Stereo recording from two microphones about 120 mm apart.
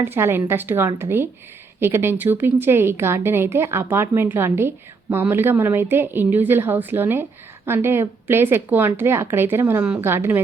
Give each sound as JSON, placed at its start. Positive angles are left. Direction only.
{"t": 0.0, "sound": "a woman's voice", "side_deg": -20}